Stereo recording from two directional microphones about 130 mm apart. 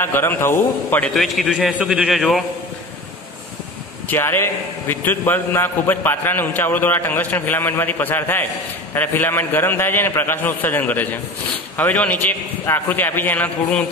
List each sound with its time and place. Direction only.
0.0 s a man's voice: 15° left (ahead or behind)
1.1 s a man's voice: centre (ahead or behind)
4.1 s a man's voice: 15° left (ahead or behind)